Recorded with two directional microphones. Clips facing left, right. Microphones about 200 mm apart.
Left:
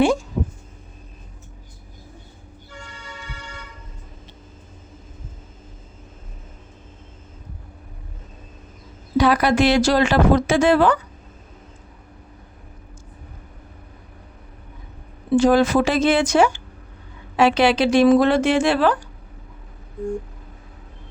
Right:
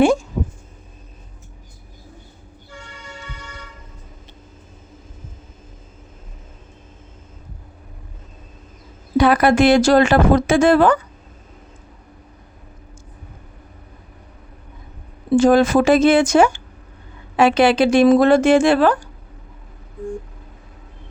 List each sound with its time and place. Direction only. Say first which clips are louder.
9.1 s speech: right 3 dB; 55° right (ahead or behind)
15.3 s speech: right 2 dB; 45° right (ahead or behind)